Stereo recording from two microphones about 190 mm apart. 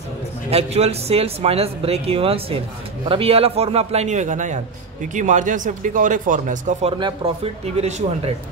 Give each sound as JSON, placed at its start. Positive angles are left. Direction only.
{"t": 0.5, "sound": "speech", "side_deg": -35}
{"t": 6.9, "sound": "speech", "side_deg": -25}